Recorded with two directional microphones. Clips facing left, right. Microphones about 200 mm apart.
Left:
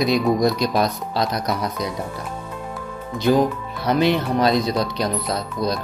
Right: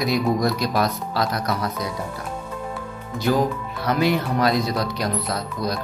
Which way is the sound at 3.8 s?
25° left (ahead or behind).